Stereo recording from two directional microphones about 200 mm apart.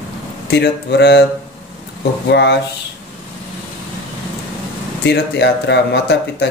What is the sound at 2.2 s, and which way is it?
Speech, 60° left (ahead or behind).